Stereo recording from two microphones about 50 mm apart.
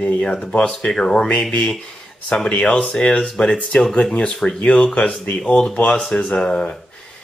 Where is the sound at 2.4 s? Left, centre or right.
Left.